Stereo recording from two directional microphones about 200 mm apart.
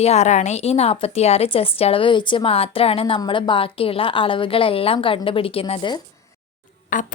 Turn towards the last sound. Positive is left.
turn(degrees=40)  # may be behind; listen again after turning